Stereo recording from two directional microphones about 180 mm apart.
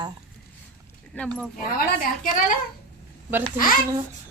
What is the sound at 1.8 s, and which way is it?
Speech, 50° left (ahead or behind).